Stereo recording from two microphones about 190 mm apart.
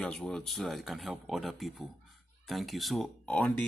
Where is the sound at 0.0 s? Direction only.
5° left (ahead or behind).